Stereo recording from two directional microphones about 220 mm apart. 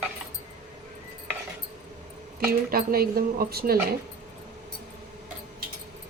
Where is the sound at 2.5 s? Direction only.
45° right (ahead or behind).